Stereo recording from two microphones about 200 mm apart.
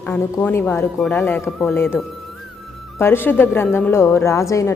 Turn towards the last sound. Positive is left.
turn(degrees=15)  # may be behind; listen again after turning